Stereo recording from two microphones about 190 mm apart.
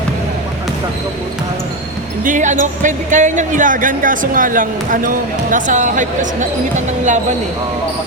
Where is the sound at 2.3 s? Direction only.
40° right (ahead or behind).